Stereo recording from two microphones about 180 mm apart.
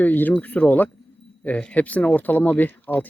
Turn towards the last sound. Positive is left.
turn(degrees=10)  # may be behind; listen again after turning